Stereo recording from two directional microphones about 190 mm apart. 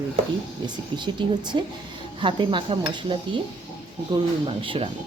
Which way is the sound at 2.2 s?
25° right (ahead or behind).